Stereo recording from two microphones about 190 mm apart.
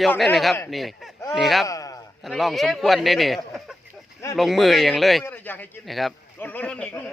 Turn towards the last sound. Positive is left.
turn(degrees=10)  # may be behind; listen again after turning